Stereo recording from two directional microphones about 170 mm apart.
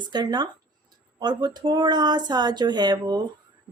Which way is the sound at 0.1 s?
25° right (ahead or behind).